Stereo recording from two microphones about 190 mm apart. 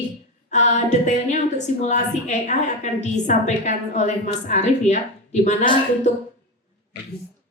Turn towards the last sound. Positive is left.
turn(degrees=40)  # may be behind; listen again after turning